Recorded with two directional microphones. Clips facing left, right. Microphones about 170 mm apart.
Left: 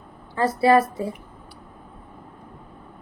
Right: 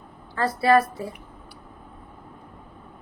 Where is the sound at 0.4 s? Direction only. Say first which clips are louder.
Left 2 dB; 20° left (ahead or behind).